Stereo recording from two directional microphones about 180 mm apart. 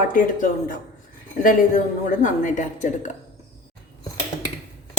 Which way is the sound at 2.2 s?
45° left (ahead or behind).